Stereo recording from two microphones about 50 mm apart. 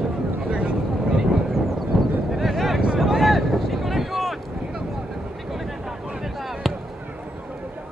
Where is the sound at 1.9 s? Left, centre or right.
Centre.